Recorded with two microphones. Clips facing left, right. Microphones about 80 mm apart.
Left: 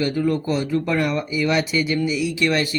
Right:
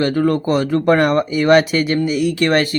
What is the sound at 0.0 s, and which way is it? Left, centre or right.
Speech, right.